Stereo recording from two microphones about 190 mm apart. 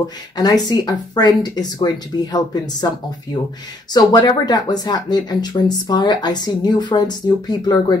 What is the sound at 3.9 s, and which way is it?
Speech, 20° left (ahead or behind).